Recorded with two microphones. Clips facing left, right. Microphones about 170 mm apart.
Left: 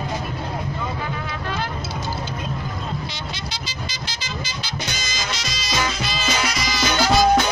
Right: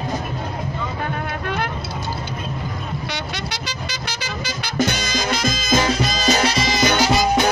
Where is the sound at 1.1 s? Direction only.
60° right (ahead or behind).